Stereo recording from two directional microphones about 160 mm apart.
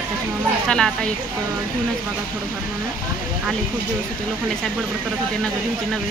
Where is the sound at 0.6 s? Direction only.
5° left (ahead or behind).